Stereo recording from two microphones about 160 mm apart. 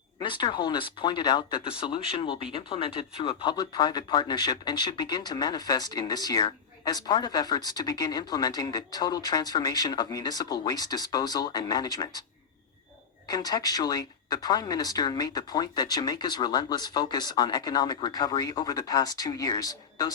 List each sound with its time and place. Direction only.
0.2 s speech: 30° left (ahead or behind)
13.2 s speech: 25° left (ahead or behind)